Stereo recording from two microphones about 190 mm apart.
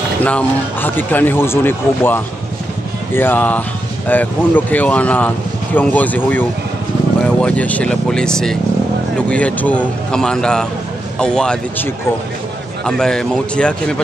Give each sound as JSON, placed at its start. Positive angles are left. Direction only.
{"t": 0.2, "sound": "speech", "side_deg": 10}